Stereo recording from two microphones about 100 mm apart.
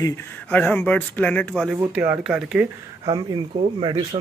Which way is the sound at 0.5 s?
20° left (ahead or behind).